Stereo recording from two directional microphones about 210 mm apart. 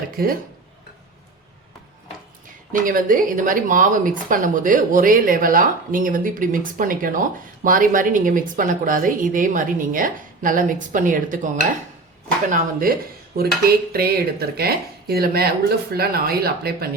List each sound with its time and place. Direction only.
0.2 s a woman's voice: 45° right (ahead or behind)
2.8 s a woman's voice: 40° right (ahead or behind)